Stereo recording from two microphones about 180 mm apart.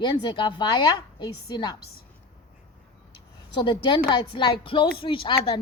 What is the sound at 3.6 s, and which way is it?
Speech, 25° left (ahead or behind).